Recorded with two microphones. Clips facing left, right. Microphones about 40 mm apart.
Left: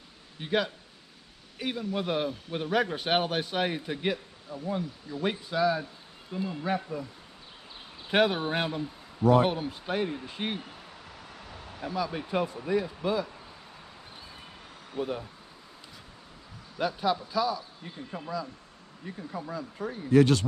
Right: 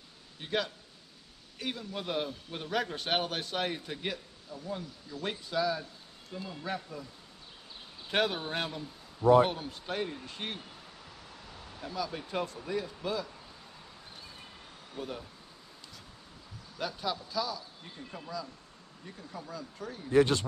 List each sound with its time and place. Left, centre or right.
0.4 s a man's voice: centre
8.1 s a man's voice: centre
14.9 s speech: centre
16.7 s a man's voice: centre